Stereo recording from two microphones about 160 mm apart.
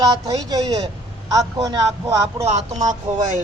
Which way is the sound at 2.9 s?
50° right (ahead or behind).